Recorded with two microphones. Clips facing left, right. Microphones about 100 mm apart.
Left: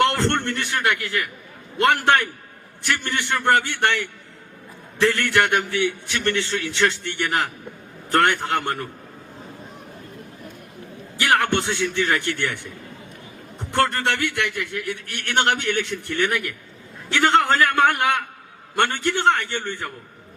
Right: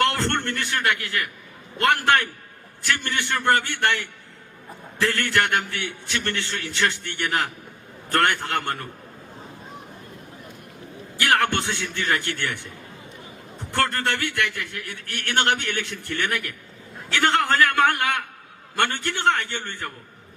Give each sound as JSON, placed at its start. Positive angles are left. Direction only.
{"t": 0.0, "sound": "a sound", "side_deg": 20}
{"t": 0.4, "sound": "a man's voice", "side_deg": 15}
{"t": 4.9, "sound": "a man's voice", "side_deg": 20}
{"t": 11.2, "sound": "a sound", "side_deg": 15}
{"t": 11.5, "sound": "a man's voice", "side_deg": 20}
{"t": 13.7, "sound": "a man's voice", "side_deg": 15}